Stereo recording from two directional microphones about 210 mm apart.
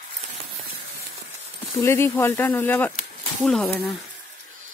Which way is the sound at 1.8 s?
10° left (ahead or behind).